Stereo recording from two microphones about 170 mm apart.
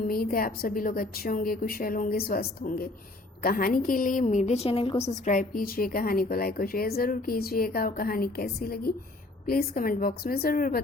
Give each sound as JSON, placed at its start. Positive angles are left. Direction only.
{"t": 0.1, "sound": "a woman's voice", "side_deg": 60}